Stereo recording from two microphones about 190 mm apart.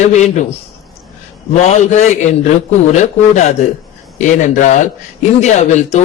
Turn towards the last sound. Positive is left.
turn(degrees=40)  # may be behind; listen again after turning